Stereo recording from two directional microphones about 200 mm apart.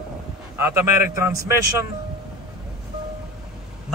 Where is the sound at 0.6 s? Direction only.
10° right (ahead or behind).